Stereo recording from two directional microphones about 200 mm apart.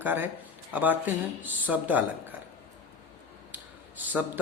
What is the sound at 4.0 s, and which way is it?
Speech, 10° right (ahead or behind).